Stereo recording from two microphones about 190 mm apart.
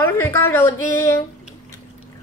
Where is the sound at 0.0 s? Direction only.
10° left (ahead or behind).